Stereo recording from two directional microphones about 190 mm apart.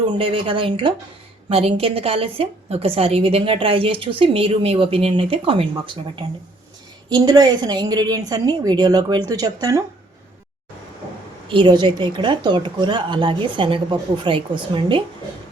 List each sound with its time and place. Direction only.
0.2 s a woman's voice: 30° right (ahead or behind)
11.4 s speech: 25° right (ahead or behind)